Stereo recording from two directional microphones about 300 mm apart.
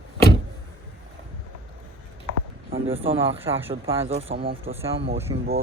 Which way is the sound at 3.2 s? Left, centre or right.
Centre.